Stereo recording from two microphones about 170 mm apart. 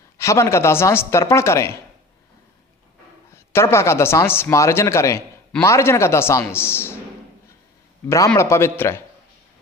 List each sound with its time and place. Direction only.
0.2 s speech: 15° left (ahead or behind)
3.3 s speech: 15° left (ahead or behind)
8.4 s speech: 15° left (ahead or behind)